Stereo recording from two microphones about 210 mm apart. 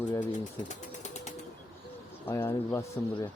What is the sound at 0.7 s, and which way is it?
Ratchet, 35° left (ahead or behind).